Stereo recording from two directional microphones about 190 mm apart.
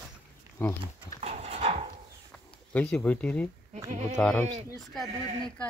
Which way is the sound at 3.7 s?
35° right (ahead or behind).